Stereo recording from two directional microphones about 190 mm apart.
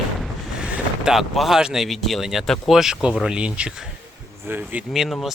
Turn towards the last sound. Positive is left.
turn(degrees=0)  # may be behind; listen again after turning